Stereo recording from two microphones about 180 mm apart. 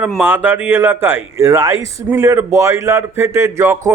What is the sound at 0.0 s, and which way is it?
Speech, 10° right (ahead or behind).